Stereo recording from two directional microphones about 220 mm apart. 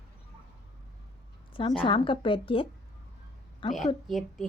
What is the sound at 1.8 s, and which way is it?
Speech, 25° left (ahead or behind).